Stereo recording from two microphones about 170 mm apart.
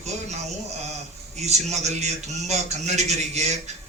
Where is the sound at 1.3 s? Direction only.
40° right (ahead or behind).